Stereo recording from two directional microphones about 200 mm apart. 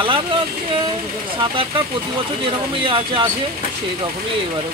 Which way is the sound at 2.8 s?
25° right (ahead or behind).